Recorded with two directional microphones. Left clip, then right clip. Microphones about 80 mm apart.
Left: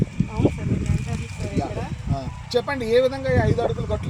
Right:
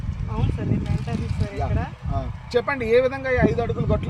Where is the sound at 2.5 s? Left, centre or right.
Centre.